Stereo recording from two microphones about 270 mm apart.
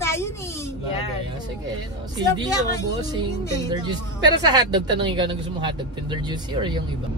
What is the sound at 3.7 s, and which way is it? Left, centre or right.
Speech, centre.